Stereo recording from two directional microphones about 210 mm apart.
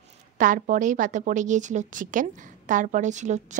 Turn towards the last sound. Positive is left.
turn(degrees=-35)  # may be behind; listen again after turning